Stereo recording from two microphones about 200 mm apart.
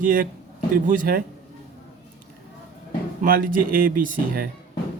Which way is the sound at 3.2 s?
45° right (ahead or behind).